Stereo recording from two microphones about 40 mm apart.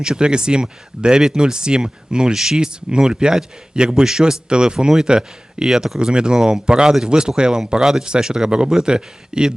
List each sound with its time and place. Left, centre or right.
0.0 s speech: centre
2.3 s speech: centre
5.6 s speech: centre
6.0 s speech: right